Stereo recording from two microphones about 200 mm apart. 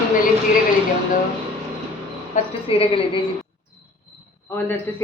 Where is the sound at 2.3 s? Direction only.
40° left (ahead or behind).